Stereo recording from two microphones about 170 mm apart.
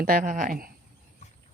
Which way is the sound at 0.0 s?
55° right (ahead or behind).